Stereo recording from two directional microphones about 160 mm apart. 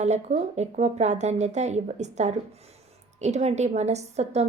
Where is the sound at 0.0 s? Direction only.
45° right (ahead or behind).